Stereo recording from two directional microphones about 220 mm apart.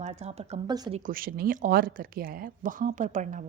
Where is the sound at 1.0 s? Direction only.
40° right (ahead or behind).